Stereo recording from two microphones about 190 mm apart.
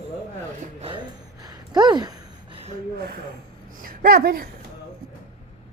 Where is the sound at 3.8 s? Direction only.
50° right (ahead or behind).